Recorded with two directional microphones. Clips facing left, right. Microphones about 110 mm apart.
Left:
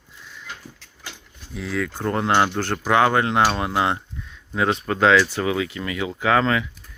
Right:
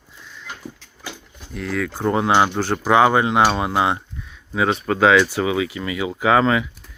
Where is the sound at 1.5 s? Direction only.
Centre (ahead or behind).